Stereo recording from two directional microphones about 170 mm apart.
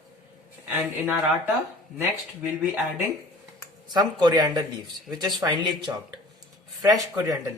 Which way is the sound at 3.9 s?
25° right (ahead or behind).